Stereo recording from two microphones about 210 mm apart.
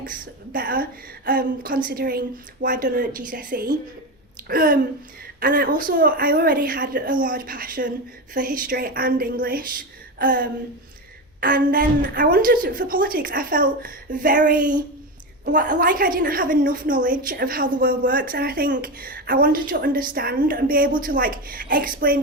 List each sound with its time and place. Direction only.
0.0 s a woman's voice: 40° right (ahead or behind)
15.7 s a woman's voice: 45° right (ahead or behind)